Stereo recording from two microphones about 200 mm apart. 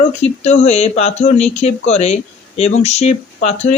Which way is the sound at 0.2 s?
35° left (ahead or behind).